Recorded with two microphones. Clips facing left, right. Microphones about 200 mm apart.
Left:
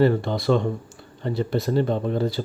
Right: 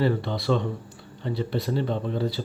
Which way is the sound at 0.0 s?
45° left (ahead or behind).